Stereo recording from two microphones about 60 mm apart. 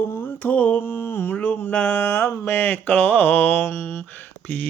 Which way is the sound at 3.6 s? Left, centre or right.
Left.